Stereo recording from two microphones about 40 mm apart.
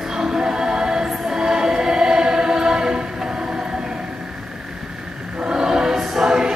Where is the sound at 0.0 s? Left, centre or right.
Centre.